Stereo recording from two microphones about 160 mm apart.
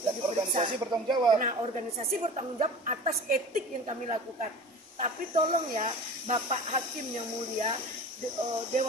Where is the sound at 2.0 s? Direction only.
40° right (ahead or behind).